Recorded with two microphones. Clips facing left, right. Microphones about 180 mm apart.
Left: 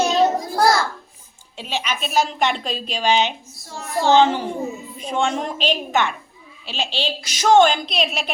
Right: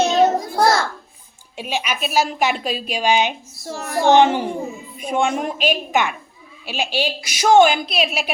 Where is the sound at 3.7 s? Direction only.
75° right (ahead or behind).